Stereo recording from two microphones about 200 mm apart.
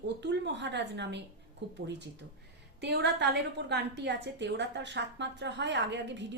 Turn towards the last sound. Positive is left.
turn(degrees=-60)  # may be behind; listen again after turning